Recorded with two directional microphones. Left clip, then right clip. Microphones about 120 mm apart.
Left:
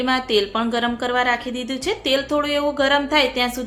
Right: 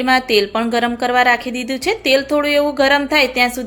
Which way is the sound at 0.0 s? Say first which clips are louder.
Right 5 dB; 25° right (ahead or behind).